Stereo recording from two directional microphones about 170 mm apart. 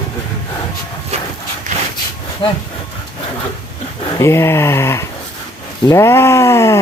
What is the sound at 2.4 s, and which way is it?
Speech, 30° left (ahead or behind).